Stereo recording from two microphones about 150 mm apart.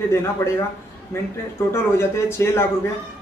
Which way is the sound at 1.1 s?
20° left (ahead or behind).